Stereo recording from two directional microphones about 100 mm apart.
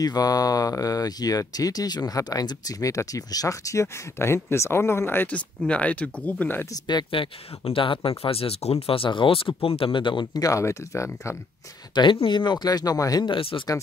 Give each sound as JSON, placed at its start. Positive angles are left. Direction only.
{"t": 0.0, "sound": "speech", "side_deg": 40}
{"t": 6.9, "sound": "speech", "side_deg": 55}
{"t": 10.4, "sound": "speech", "side_deg": 30}
{"t": 11.9, "sound": "speech", "side_deg": 50}
{"t": 13.2, "sound": "speech", "side_deg": 60}